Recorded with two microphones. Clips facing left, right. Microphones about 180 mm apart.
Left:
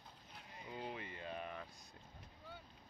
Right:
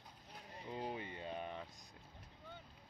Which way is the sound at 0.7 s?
30° right (ahead or behind).